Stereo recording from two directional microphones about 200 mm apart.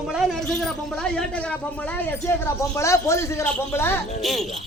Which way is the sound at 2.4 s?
15° left (ahead or behind).